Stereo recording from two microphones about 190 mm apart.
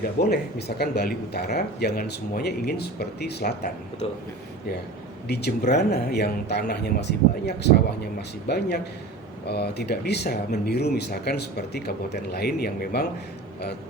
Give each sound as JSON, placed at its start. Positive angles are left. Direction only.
{"t": 0.2, "sound": "speech", "side_deg": 55}
{"t": 5.3, "sound": "speech", "side_deg": 60}